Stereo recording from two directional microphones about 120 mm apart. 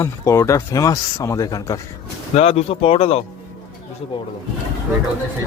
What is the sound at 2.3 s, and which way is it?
Speech, 60° left (ahead or behind).